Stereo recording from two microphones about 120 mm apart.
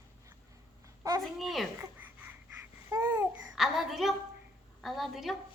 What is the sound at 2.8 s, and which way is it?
Babbling, 20° right (ahead or behind).